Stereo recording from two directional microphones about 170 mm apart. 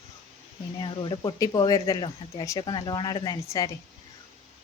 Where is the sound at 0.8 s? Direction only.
30° left (ahead or behind).